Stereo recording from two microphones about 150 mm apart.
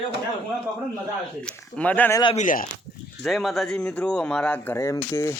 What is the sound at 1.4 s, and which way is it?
Speech, 10° left (ahead or behind).